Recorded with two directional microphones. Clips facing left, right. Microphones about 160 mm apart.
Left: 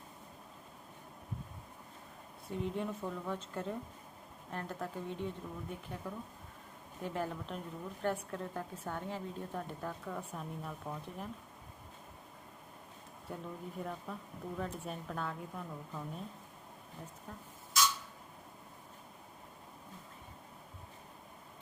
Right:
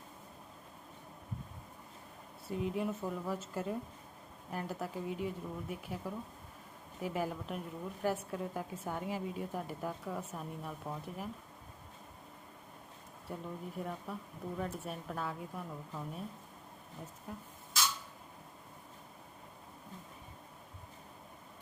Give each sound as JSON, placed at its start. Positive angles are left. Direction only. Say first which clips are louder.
{"t": 2.5, "sound": "a woman's voice", "louder": "right 2 dB", "side_deg": -5}
{"t": 13.2, "sound": "speech", "louder": "right 1 dB", "side_deg": 0}
{"t": 17.3, "sound": "a woman's voice", "louder": "right 5 dB", "side_deg": -10}